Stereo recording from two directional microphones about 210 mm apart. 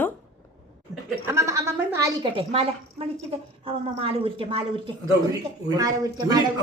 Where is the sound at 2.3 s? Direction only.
25° right (ahead or behind).